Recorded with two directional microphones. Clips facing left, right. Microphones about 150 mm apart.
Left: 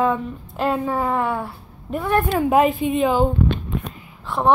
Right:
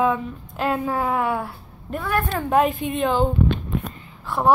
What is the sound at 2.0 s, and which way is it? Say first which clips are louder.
Speech: left 4 dB; 20° left (ahead or behind).